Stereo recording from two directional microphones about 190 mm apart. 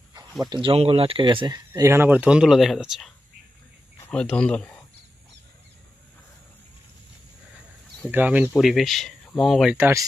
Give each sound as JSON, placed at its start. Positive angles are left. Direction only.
{"t": 0.5, "sound": "speech", "side_deg": -25}
{"t": 1.7, "sound": "speech", "side_deg": -15}
{"t": 4.1, "sound": "speech", "side_deg": 5}
{"t": 8.1, "sound": "speech", "side_deg": -10}